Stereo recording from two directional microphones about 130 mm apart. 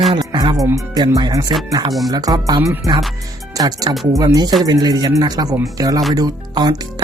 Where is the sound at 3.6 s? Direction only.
30° right (ahead or behind).